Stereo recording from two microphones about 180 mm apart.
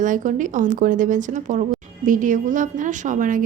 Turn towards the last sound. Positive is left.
turn(degrees=-45)  # may be behind; listen again after turning